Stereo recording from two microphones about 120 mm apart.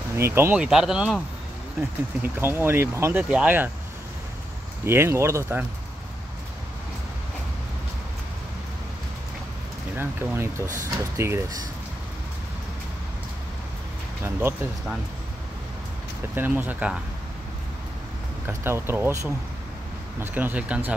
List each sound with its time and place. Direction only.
0.2 s speech: 20° right (ahead or behind)
0.6 s speech: 5° right (ahead or behind)
1.8 s speech: 15° right (ahead or behind)
4.8 s speech: 20° right (ahead or behind)
9.9 s speech: 20° right (ahead or behind)
16.3 s speech: 15° right (ahead or behind)
18.5 s speech: 20° right (ahead or behind)